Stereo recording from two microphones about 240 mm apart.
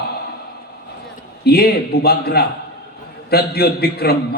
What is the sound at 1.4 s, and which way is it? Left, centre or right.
A man's voice, left.